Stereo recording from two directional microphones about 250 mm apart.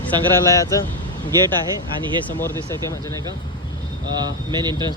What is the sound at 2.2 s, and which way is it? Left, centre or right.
Speech, centre.